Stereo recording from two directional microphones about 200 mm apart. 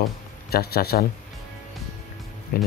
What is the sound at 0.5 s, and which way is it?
Speech, 50° left (ahead or behind).